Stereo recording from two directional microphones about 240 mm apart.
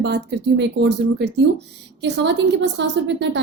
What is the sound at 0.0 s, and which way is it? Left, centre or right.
A woman's voice, right.